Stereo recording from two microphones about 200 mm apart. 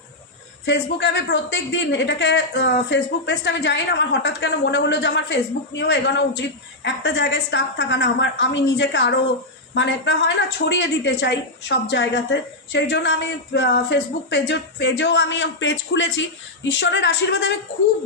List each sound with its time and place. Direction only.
0.6 s a woman's voice: 60° left (ahead or behind)